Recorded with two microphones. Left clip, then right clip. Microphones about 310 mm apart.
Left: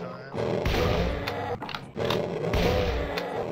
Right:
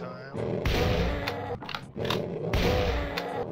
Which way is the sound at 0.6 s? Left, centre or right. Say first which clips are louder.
Even; centre.